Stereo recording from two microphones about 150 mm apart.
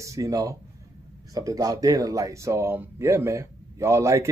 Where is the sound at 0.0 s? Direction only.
20° right (ahead or behind).